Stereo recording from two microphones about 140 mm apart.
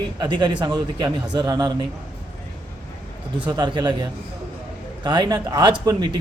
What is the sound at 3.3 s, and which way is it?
A man's voice, 35° right (ahead or behind).